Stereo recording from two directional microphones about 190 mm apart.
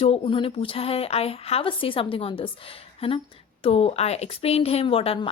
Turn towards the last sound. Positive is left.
turn(degrees=30)  # may be behind; listen again after turning